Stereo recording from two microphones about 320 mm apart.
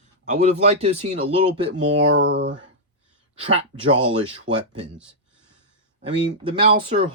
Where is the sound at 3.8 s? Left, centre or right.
Right.